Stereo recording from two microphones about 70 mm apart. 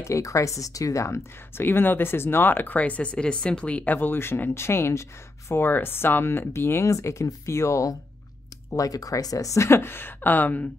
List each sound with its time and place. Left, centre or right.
0.0 s speech: left
1.6 s speech: left
8.6 s speech: left